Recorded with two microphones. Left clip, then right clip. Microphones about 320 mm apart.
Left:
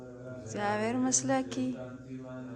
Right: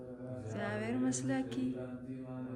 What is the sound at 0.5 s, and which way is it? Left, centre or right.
Music, centre.